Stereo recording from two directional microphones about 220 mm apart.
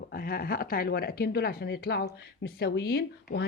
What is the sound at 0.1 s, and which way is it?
Speech, 40° left (ahead or behind).